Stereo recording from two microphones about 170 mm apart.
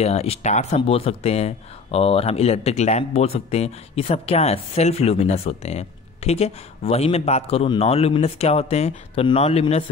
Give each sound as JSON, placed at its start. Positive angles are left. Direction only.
{"t": 0.0, "sound": "speech", "side_deg": 40}